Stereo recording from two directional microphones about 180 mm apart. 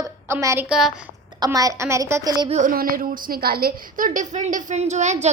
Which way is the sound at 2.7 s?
55° right (ahead or behind).